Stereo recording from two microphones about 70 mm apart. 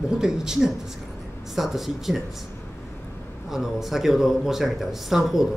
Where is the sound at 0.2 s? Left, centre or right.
Centre.